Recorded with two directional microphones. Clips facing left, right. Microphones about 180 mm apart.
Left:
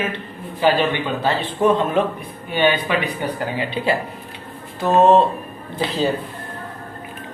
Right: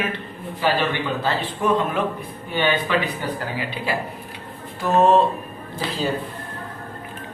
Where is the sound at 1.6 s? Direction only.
25° left (ahead or behind).